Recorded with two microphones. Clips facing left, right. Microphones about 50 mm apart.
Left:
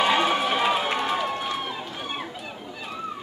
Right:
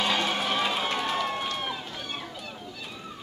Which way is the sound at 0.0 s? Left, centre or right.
Centre.